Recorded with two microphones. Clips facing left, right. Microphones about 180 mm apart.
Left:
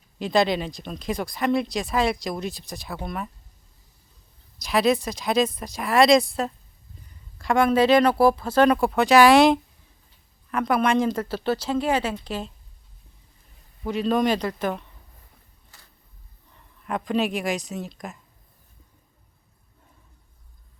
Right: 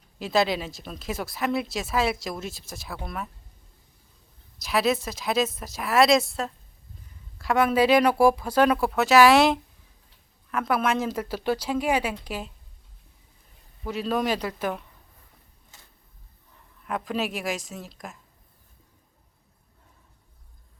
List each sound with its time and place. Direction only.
0.2 s speech: 5° right (ahead or behind)
4.5 s speech: centre (ahead or behind)
13.8 s speech: 5° right (ahead or behind)
15.7 s tick-tock: 20° right (ahead or behind)
16.8 s speech: centre (ahead or behind)